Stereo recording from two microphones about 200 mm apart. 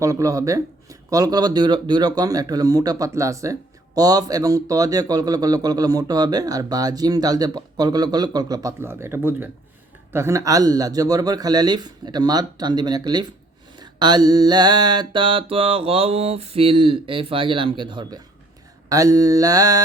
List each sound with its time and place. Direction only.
0.0 s speech: 15° right (ahead or behind)
18.9 s mantra: 15° right (ahead or behind)